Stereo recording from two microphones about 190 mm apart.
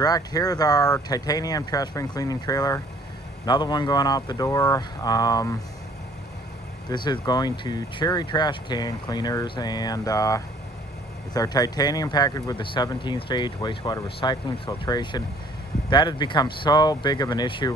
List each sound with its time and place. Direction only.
0.0 s speech: 20° left (ahead or behind)
6.9 s speech: 25° left (ahead or behind)